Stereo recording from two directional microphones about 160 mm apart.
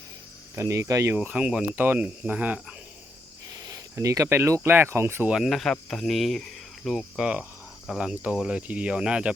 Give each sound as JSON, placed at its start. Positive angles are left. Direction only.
{"t": 0.5, "sound": "speech", "side_deg": -20}
{"t": 3.5, "sound": "speech", "side_deg": -20}
{"t": 5.3, "sound": "speech", "side_deg": 0}